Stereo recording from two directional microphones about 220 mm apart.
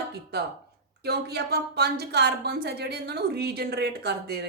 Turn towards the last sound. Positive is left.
turn(degrees=-45)  # may be behind; listen again after turning